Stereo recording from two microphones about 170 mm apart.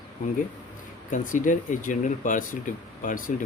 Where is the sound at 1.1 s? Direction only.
50° left (ahead or behind).